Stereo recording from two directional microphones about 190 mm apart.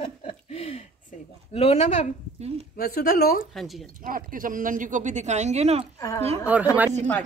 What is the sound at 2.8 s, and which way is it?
Speech, 55° left (ahead or behind).